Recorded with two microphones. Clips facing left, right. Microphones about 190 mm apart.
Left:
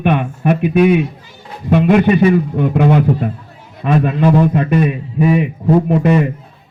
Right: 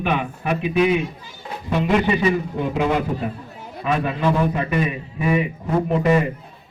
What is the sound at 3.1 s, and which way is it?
Speech, 70° left (ahead or behind).